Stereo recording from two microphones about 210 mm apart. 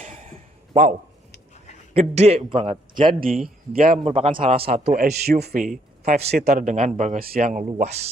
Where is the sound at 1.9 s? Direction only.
30° right (ahead or behind).